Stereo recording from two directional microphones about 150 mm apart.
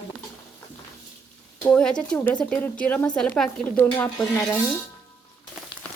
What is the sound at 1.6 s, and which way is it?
A woman's voice, 10° left (ahead or behind).